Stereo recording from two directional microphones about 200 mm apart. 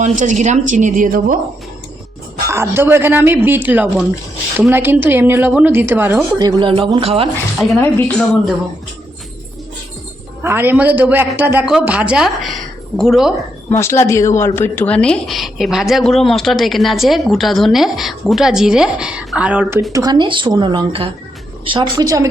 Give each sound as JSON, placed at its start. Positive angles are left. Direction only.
{"t": 0.0, "sound": "a woman's voice", "side_deg": -35}
{"t": 2.5, "sound": "a man's voice", "side_deg": -10}
{"t": 6.4, "sound": "speech", "side_deg": -25}
{"t": 7.8, "sound": "a woman's voice", "side_deg": 10}
{"t": 10.4, "sound": "a man's voice", "side_deg": -10}
{"t": 13.7, "sound": "speech", "side_deg": 15}
{"t": 19.9, "sound": "speech", "side_deg": -20}